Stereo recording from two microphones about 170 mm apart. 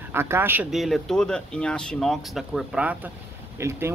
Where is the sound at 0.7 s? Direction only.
Centre (ahead or behind).